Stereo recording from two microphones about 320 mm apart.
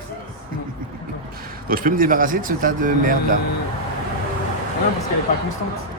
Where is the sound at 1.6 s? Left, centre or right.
Right.